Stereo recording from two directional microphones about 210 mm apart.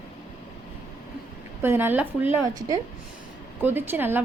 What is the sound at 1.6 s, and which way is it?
A woman's voice, 10° right (ahead or behind).